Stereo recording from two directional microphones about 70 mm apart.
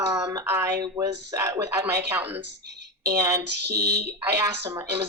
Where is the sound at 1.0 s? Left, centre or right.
Right.